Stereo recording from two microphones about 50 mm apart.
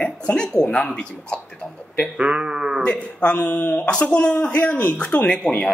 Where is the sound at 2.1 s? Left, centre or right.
Right.